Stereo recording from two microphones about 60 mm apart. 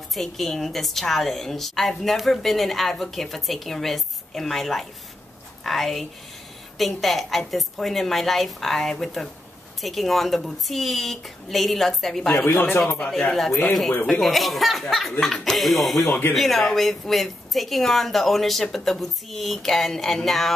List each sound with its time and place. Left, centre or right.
0.1 s a woman's voice: centre
12.5 s speech: left
13.3 s a woman's voice: centre
16.1 s speech: left
16.3 s a woman's voice: centre